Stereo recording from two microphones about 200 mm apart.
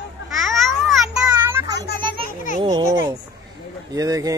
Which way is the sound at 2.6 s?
20° right (ahead or behind).